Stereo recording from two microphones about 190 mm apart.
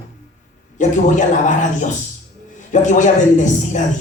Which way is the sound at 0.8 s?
40° left (ahead or behind).